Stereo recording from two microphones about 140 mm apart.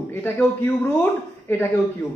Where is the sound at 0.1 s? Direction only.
15° left (ahead or behind).